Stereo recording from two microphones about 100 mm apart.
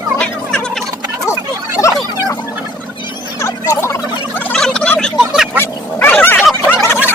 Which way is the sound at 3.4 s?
25° left (ahead or behind).